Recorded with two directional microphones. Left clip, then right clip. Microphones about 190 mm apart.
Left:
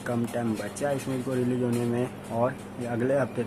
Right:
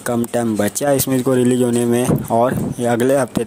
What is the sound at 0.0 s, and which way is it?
Speech, 40° right (ahead or behind).